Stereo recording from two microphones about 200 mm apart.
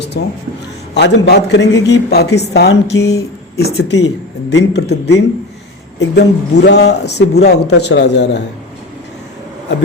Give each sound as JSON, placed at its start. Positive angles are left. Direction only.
{"t": 0.1, "sound": "speech", "side_deg": 55}